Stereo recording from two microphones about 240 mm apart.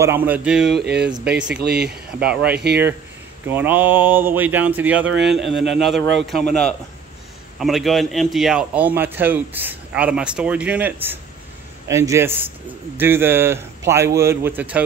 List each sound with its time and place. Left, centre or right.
0.0 s a man's voice: centre
0.7 s speech: right
3.4 s a man's voice: centre
7.5 s a man's voice: centre